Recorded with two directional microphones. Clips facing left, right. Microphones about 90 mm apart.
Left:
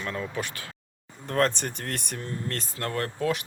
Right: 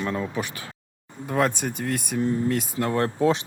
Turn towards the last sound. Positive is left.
turn(degrees=-25)  # may be behind; listen again after turning